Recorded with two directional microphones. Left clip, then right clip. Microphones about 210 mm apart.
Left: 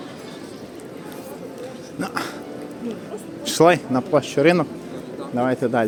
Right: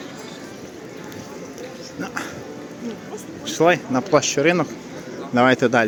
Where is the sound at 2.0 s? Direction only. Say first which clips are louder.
Left 2 dB; 20° left (ahead or behind).